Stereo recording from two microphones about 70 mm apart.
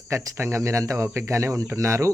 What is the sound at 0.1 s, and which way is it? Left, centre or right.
Speech, right.